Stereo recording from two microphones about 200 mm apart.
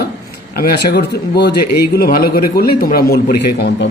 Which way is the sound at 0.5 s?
50° left (ahead or behind).